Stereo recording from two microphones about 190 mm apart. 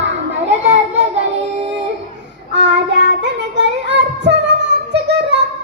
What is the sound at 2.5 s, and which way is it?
Child singing, 65° right (ahead or behind).